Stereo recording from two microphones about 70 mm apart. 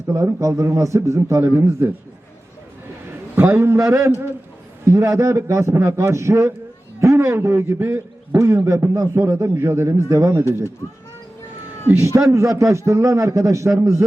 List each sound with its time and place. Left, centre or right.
0.3 s a man's voice: right
3.1 s a sound: right
3.5 s a man's voice: right
11.9 s a man's voice: right